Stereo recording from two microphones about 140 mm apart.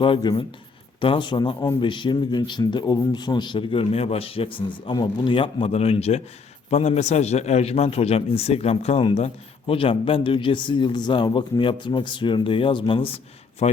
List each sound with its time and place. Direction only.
0.0 s a man's voice: 35° left (ahead or behind)
13.6 s a man's voice: 50° left (ahead or behind)